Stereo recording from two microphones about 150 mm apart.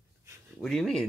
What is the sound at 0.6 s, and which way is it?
Speech, centre (ahead or behind).